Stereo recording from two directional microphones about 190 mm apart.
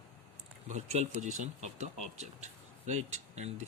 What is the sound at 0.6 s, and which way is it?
Speech, 35° right (ahead or behind).